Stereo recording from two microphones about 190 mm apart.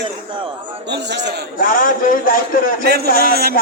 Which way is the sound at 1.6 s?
45° left (ahead or behind).